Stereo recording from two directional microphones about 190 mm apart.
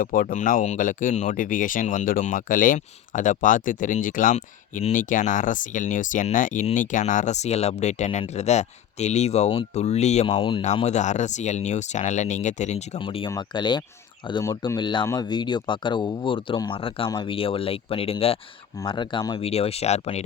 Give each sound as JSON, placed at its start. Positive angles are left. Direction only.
{"t": 0.0, "sound": "speech", "side_deg": 45}